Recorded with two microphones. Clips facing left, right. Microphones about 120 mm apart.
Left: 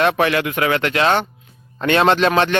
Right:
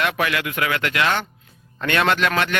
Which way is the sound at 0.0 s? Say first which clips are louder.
Left 6 dB; 30° left (ahead or behind).